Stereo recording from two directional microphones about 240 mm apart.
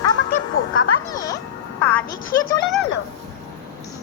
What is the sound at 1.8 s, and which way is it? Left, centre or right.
Music, centre.